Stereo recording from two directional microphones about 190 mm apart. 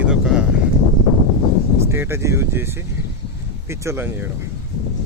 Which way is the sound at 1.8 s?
15° right (ahead or behind).